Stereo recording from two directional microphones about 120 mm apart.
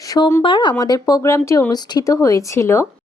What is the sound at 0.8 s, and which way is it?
Speech, 30° left (ahead or behind).